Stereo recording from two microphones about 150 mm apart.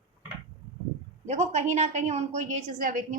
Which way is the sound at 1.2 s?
50° right (ahead or behind).